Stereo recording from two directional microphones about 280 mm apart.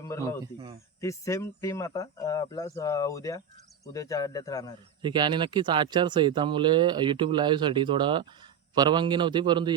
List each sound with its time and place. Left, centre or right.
0.0 s speech: centre
5.0 s speech: centre